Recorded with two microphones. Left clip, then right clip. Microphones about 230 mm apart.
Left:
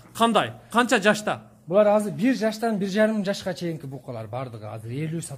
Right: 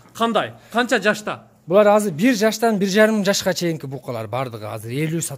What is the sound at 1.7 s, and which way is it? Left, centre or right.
A man's voice, right.